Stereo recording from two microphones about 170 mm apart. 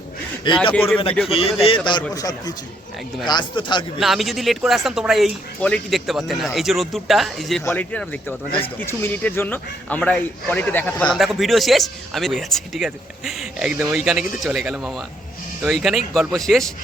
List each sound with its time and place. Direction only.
0.7 s speech: 10° left (ahead or behind)
1.3 s a man's voice: 35° left (ahead or behind)
4.0 s a man's voice: centre (ahead or behind)
7.6 s a man's voice: 10° left (ahead or behind)